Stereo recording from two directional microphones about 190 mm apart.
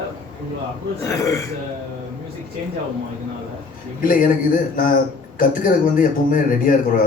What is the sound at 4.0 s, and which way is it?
A man's voice, 45° left (ahead or behind).